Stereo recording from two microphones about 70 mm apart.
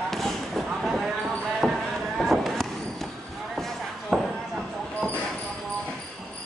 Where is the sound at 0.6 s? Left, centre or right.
Centre.